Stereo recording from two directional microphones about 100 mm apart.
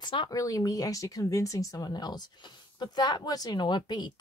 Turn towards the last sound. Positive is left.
turn(degrees=45)  # may be behind; listen again after turning